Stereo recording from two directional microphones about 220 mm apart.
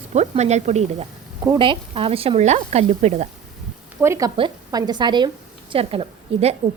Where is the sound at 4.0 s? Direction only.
15° right (ahead or behind).